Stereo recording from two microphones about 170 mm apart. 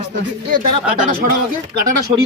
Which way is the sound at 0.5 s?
50° right (ahead or behind).